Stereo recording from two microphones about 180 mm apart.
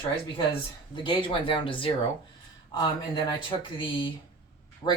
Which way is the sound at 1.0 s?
30° left (ahead or behind).